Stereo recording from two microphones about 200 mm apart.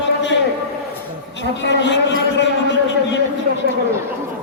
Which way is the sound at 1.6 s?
60° left (ahead or behind).